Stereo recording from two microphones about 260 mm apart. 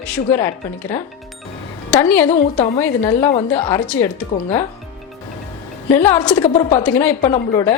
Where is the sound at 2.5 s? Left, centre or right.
Left.